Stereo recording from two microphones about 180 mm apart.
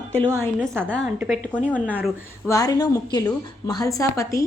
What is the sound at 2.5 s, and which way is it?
A woman's voice, 20° left (ahead or behind).